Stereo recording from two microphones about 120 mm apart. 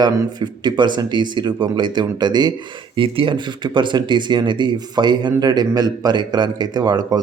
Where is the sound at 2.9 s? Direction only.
45° right (ahead or behind).